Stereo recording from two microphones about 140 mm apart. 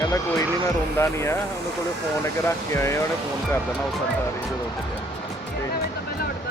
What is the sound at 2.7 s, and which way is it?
Speech, 20° left (ahead or behind).